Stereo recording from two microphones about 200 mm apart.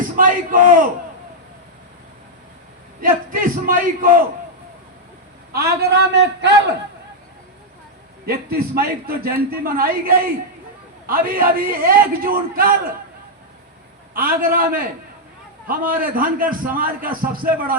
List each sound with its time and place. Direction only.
0.2 s a man's voice: 40° right (ahead or behind)
3.0 s a man's voice: 45° right (ahead or behind)
5.5 s a man's voice: 50° right (ahead or behind)
8.3 s a man's voice: 50° right (ahead or behind)
14.1 s a man's voice: 45° right (ahead or behind)